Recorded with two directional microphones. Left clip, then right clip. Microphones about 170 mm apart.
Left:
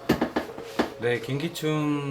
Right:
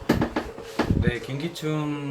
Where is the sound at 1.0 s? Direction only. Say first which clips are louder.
Left 3 dB; 65° left (ahead or behind).